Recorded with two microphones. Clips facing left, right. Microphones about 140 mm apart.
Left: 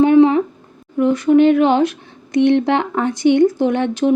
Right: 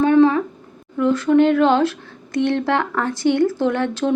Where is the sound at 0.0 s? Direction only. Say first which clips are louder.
Left 3 dB; 20° left (ahead or behind).